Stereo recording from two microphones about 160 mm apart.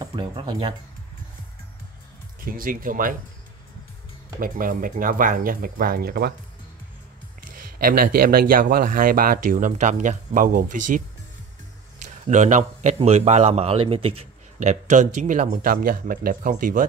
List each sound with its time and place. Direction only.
0.0 s speech: 25° right (ahead or behind)
2.4 s a man's voice: 60° right (ahead or behind)
4.4 s a man's voice: 60° right (ahead or behind)
7.5 s a man's voice: 65° right (ahead or behind)
12.3 s a man's voice: 50° right (ahead or behind)